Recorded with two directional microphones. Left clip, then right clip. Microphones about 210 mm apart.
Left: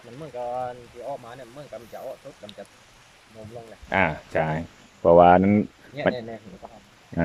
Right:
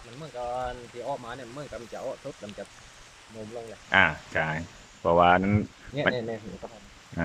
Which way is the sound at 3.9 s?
20° left (ahead or behind).